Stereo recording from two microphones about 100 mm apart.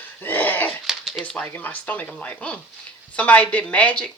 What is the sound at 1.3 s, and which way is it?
Speech, 15° left (ahead or behind).